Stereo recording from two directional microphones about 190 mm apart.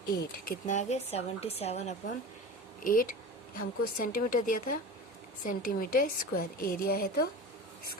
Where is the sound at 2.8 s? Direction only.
45° left (ahead or behind).